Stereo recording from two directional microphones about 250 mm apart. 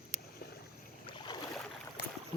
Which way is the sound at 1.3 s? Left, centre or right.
Centre.